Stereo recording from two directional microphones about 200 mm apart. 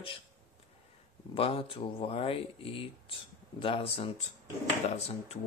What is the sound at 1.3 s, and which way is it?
Speech, 30° left (ahead or behind).